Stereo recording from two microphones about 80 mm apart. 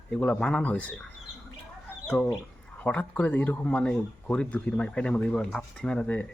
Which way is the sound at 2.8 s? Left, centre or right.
Left.